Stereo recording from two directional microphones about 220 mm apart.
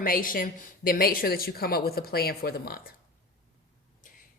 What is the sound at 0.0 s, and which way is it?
Speech, 40° left (ahead or behind).